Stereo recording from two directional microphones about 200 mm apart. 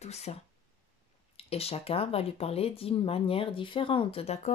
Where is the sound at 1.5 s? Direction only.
30° left (ahead or behind).